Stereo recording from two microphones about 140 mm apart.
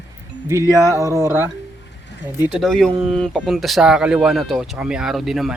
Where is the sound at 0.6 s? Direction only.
20° left (ahead or behind).